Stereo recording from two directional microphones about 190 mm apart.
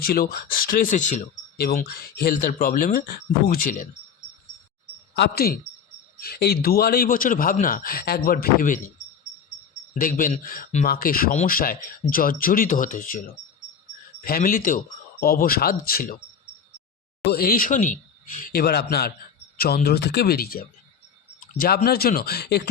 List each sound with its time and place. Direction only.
0.0 s speech: 50° left (ahead or behind)
1.5 s speech: 55° left (ahead or behind)
5.1 s speech: 55° left (ahead or behind)
10.0 s speech: 45° left (ahead or behind)
14.3 s speech: 50° left (ahead or behind)
17.2 s speech: 50° left (ahead or behind)